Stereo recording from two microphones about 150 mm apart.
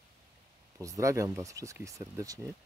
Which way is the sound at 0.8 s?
20° right (ahead or behind).